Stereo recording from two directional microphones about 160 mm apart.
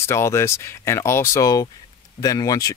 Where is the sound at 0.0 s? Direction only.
15° left (ahead or behind).